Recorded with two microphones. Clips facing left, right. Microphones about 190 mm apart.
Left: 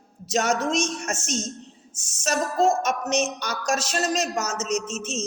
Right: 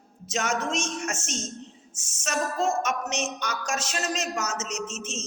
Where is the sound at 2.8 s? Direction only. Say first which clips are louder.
Left 4 dB; 40° left (ahead or behind).